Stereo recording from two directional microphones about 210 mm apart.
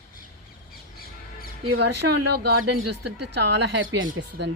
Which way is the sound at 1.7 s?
55° right (ahead or behind).